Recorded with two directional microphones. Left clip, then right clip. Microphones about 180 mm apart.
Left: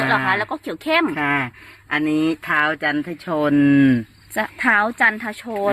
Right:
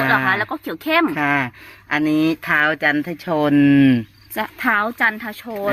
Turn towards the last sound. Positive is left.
turn(degrees=15)  # may be behind; listen again after turning